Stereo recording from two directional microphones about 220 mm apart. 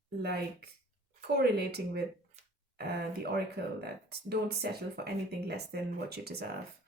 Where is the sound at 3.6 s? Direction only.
50° right (ahead or behind).